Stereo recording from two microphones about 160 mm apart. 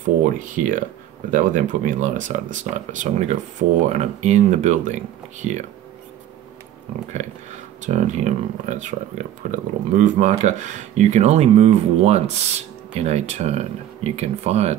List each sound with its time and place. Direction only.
0.6 s speech: 55° right (ahead or behind)
7.2 s speech: 45° right (ahead or behind)